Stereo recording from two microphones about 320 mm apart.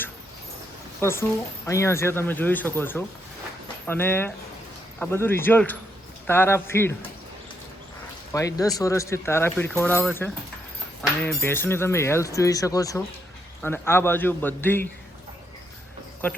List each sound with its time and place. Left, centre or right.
1.6 s speech: centre
8.3 s speech: centre